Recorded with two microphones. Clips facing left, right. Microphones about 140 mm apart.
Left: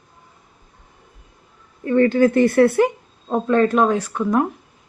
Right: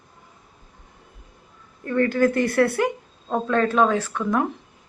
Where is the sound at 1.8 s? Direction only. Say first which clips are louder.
Left 5 dB; 20° left (ahead or behind).